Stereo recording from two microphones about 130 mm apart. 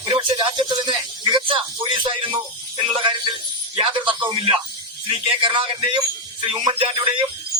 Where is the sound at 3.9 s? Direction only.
40° right (ahead or behind).